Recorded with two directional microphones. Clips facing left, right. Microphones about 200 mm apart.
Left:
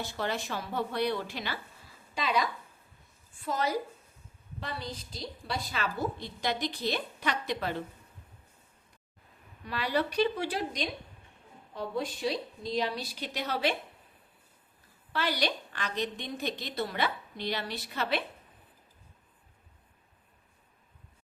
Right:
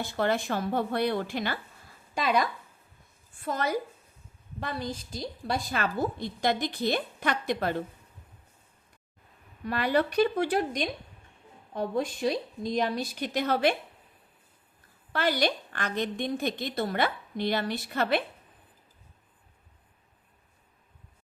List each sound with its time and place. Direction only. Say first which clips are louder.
0.2 s a woman's voice: right 7 dB; 55° right (ahead or behind)
9.6 s a woman's voice: right 5 dB; 50° right (ahead or behind)
15.1 s a woman's voice: right 4 dB; 50° right (ahead or behind)